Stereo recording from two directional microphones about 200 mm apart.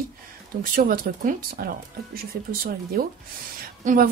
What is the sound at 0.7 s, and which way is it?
Speech, 45° right (ahead or behind).